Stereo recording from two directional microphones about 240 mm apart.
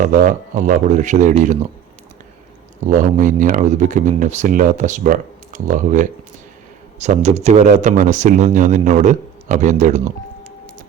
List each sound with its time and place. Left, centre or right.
0.0 s speech: right
2.8 s speech: right